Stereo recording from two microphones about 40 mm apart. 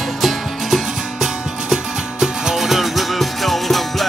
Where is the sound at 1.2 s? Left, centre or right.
Centre.